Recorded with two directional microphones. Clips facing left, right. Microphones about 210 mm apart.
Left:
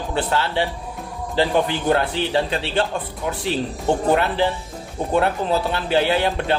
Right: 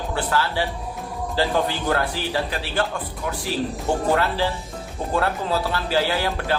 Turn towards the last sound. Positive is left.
turn(degrees=25)  # may be behind; listen again after turning